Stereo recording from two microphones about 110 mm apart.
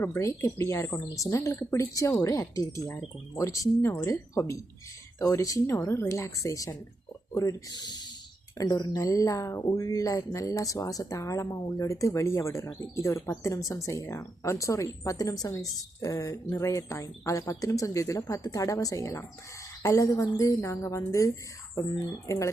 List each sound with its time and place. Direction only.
0.0 s speech: 25° left (ahead or behind)